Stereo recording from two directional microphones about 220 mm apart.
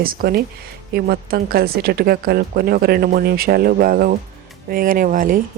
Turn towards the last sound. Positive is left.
turn(degrees=-40)  # may be behind; listen again after turning